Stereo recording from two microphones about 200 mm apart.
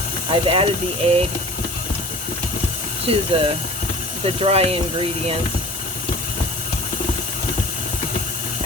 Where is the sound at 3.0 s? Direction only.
30° right (ahead or behind).